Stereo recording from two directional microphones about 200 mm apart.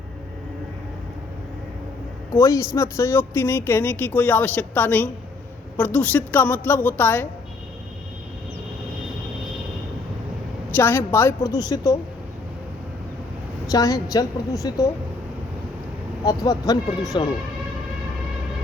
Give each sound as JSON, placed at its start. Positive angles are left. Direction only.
{"t": 2.3, "sound": "a man's voice", "side_deg": 15}
{"t": 10.8, "sound": "a man's voice", "side_deg": 10}
{"t": 13.7, "sound": "a man's voice", "side_deg": 15}
{"t": 16.2, "sound": "speech", "side_deg": 20}